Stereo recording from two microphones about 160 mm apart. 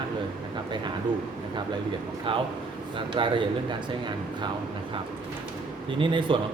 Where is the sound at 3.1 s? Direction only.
30° right (ahead or behind).